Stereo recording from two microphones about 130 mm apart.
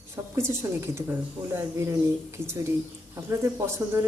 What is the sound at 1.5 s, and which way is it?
Speech, 20° right (ahead or behind).